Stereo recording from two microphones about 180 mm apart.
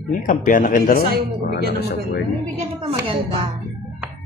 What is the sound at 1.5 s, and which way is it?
Speech, 60° left (ahead or behind).